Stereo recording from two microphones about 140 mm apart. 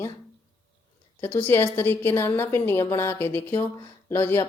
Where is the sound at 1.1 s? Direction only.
15° left (ahead or behind).